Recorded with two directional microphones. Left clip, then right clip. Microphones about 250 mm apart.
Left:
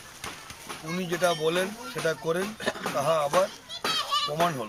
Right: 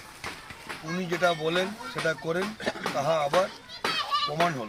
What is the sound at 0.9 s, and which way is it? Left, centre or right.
A man's voice, centre.